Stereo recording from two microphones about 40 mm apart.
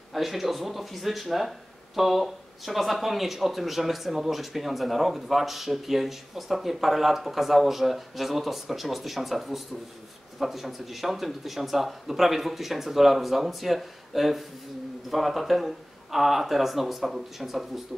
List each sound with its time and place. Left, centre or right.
0.1 s speech: centre